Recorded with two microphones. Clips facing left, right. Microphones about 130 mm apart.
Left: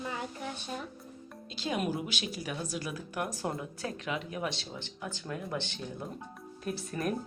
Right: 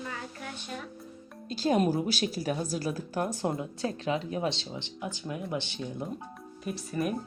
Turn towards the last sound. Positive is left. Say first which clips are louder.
# right 2 dB
turn(degrees=-5)  # may be behind; listen again after turning